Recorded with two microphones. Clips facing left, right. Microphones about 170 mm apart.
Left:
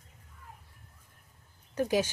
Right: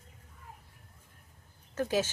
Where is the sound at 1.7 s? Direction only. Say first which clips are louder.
Left 2 dB; 15° left (ahead or behind).